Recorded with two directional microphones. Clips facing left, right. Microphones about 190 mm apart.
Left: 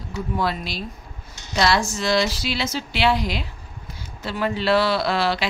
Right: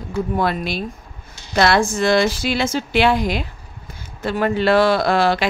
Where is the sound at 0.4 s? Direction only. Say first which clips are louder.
Right 2 dB; 55° right (ahead or behind).